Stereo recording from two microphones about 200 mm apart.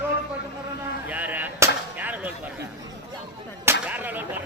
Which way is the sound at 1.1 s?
10° right (ahead or behind).